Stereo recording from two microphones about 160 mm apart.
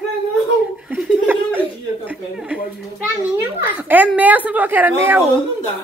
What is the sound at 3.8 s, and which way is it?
Speech, 10° right (ahead or behind).